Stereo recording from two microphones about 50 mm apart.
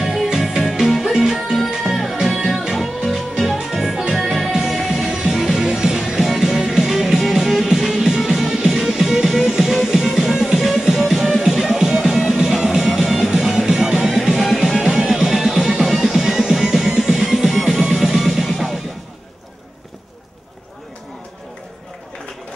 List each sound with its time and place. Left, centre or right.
0.0 s music: centre
1.9 s music: centre